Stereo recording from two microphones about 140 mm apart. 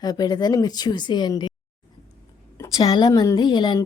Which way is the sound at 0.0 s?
30° left (ahead or behind).